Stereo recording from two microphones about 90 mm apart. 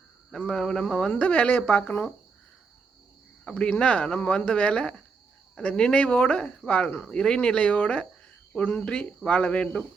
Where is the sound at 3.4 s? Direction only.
10° left (ahead or behind).